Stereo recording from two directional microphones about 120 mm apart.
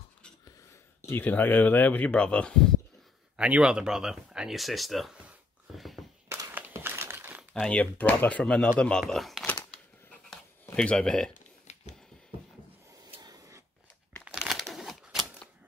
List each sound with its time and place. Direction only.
1.0 s speech: 15° left (ahead or behind)
3.3 s speech: 10° right (ahead or behind)
6.2 s a sound: 20° right (ahead or behind)
7.7 s speech: 10° left (ahead or behind)
10.7 s speech: 10° left (ahead or behind)
13.2 s a sound: 30° right (ahead or behind)
14.2 s crumpling: 5° right (ahead or behind)